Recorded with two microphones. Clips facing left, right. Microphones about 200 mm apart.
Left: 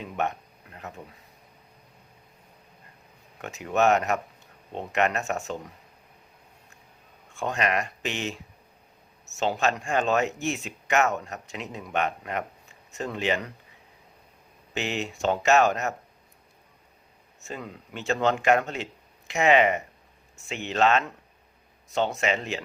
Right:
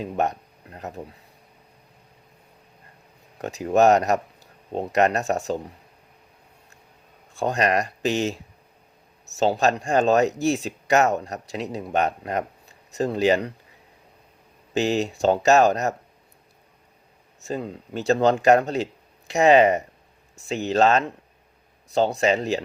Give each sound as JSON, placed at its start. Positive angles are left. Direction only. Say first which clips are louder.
{"t": 0.0, "sound": "speech", "louder": "right 5 dB", "side_deg": -35}
{"t": 3.3, "sound": "speech", "louder": "right 6 dB", "side_deg": -35}
{"t": 7.3, "sound": "speech", "louder": "right 5 dB", "side_deg": -35}
{"t": 14.7, "sound": "speech", "louder": "right 8 dB", "side_deg": -35}
{"t": 17.4, "sound": "speech", "louder": "right 8 dB", "side_deg": -35}